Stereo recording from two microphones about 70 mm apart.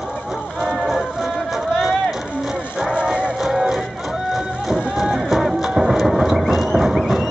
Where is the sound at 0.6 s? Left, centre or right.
Centre.